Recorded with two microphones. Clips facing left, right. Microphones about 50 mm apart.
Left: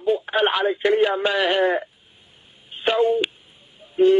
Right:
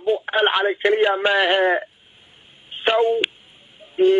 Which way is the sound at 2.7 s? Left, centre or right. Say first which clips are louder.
Right 2 dB; right.